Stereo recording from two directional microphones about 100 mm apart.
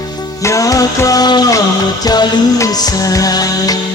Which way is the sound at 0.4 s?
35° left (ahead or behind).